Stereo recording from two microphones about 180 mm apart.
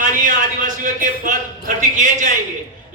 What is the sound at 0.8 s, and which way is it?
A man's voice, 45° right (ahead or behind).